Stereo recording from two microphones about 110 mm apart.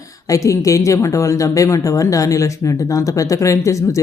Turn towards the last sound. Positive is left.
turn(degrees=30)  # may be behind; listen again after turning